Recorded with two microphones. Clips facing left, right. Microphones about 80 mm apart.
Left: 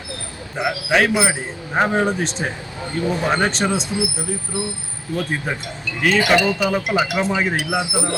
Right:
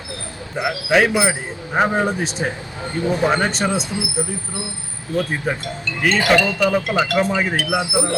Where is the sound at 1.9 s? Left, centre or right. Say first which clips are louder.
Left 1 dB; centre.